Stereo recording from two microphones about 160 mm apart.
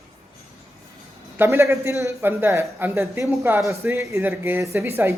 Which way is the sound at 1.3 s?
15° right (ahead or behind).